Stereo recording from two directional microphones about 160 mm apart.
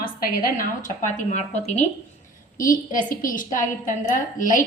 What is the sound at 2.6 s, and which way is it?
A woman's voice, 55° left (ahead or behind).